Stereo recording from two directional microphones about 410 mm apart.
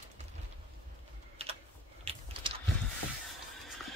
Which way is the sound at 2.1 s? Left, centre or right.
Centre.